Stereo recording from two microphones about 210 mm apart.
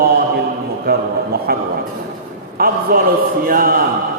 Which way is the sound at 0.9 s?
45° right (ahead or behind).